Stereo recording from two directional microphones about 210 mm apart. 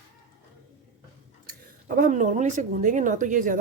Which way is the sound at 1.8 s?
40° right (ahead or behind).